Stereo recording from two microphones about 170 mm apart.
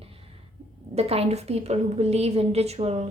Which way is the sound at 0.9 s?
35° right (ahead or behind).